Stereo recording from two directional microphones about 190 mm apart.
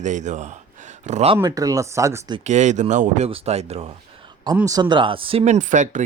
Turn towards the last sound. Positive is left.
turn(degrees=-40)  # may be behind; listen again after turning